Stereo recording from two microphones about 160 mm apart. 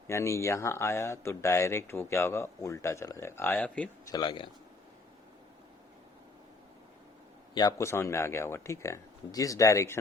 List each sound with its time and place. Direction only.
0.1 s speech: 20° left (ahead or behind)
4.1 s speech: 30° left (ahead or behind)
7.5 s speech: 20° left (ahead or behind)